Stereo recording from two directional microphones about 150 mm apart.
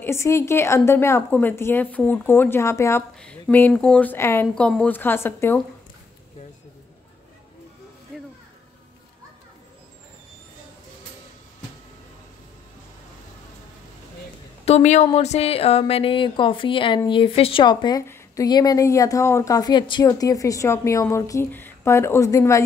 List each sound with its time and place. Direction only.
0.0 s a woman's voice: 20° left (ahead or behind)
3.2 s a woman's voice: 5° left (ahead or behind)
14.6 s a woman's voice: 50° left (ahead or behind); by 22.6 s 20° left (ahead or behind)